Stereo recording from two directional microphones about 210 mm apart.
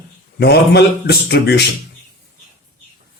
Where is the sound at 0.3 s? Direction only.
50° left (ahead or behind).